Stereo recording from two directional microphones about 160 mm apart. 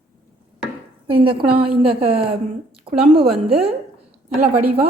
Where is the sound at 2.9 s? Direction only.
35° right (ahead or behind).